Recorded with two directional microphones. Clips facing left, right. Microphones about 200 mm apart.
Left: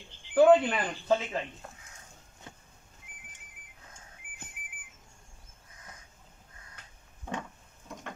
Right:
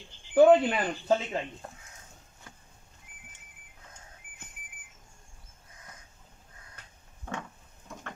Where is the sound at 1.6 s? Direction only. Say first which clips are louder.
Right 3 dB; 40° right (ahead or behind).